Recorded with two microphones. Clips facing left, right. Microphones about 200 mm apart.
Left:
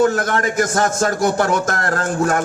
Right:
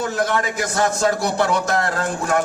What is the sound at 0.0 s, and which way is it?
A man's voice, 50° left (ahead or behind).